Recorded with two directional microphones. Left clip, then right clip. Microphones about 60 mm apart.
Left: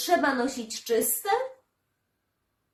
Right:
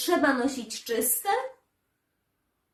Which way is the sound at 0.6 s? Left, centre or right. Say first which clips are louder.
Left 3 dB; left.